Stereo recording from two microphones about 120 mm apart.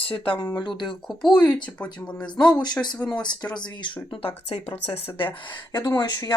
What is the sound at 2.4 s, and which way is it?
Speech, 35° left (ahead or behind).